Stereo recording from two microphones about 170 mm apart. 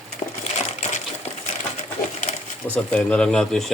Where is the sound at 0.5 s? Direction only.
40° left (ahead or behind).